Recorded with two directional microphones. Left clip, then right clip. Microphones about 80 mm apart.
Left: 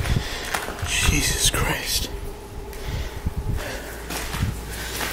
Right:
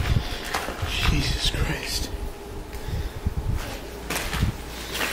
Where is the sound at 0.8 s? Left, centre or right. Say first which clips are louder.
Left 8 dB; left.